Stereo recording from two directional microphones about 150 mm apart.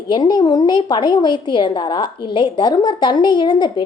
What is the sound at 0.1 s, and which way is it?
A woman's voice, 30° left (ahead or behind).